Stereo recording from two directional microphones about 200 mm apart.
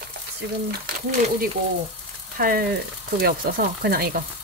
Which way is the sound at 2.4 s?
45° right (ahead or behind).